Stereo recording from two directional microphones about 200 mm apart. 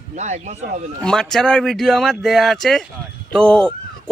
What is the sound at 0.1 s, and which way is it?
Speech, 35° right (ahead or behind).